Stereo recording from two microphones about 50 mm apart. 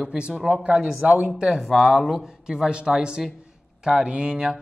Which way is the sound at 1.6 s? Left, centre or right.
Centre.